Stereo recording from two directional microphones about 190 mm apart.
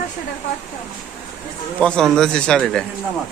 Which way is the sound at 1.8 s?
5° left (ahead or behind).